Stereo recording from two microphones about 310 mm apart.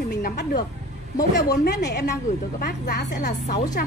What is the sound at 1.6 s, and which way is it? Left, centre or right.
A woman's voice, left.